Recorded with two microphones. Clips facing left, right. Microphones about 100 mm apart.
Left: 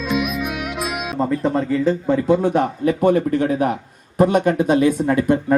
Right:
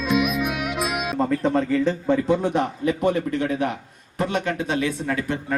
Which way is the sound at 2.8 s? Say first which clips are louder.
Left 7 dB; 40° left (ahead or behind).